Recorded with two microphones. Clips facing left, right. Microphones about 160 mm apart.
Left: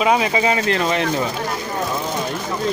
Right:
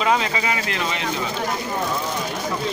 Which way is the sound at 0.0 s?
15° left (ahead or behind).